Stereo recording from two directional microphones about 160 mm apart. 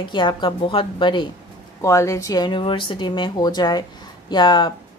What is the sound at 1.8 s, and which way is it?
Speech, 20° left (ahead or behind).